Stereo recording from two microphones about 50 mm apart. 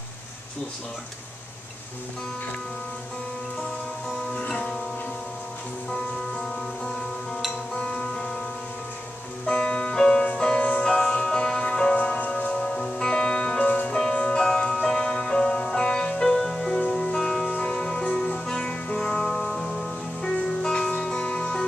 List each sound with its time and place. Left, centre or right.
4.4 s music: left
5.9 s music: centre
9.5 s music: left
12.5 s music: centre